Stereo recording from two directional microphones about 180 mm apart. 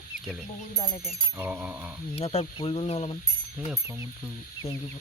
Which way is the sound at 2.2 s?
35° left (ahead or behind).